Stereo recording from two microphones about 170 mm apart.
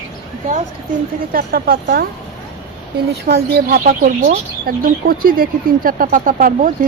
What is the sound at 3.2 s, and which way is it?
Speech, 65° right (ahead or behind).